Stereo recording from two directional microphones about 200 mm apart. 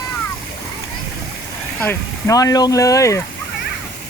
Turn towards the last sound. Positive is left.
turn(degrees=15)  # may be behind; listen again after turning